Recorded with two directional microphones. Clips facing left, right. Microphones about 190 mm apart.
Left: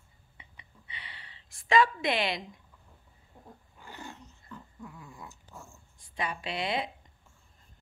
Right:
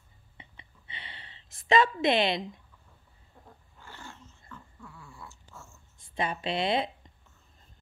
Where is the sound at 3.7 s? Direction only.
15° left (ahead or behind).